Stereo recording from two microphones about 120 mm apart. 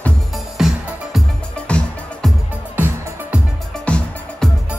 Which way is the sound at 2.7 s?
15° right (ahead or behind).